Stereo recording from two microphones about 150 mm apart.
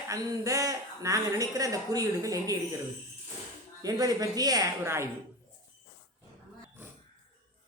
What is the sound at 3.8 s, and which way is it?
A woman's voice, 25° right (ahead or behind).